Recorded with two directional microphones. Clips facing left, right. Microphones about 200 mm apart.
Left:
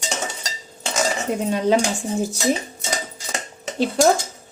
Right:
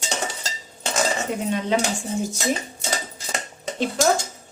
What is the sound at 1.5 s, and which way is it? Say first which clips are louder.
Speech: left 5 dB; 35° left (ahead or behind).